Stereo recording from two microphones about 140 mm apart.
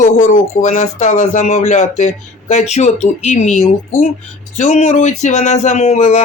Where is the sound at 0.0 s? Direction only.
65° left (ahead or behind).